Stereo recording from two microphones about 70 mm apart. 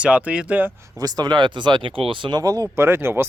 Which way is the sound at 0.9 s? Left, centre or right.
Right.